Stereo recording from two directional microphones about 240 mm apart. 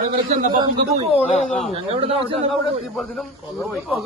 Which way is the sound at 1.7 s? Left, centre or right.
Right.